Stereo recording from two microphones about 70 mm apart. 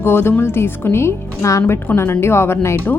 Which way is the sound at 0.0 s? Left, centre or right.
Left.